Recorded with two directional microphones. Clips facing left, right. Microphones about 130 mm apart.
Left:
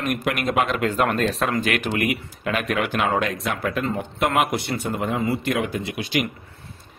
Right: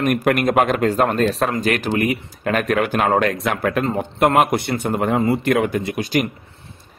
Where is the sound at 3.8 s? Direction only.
45° right (ahead or behind).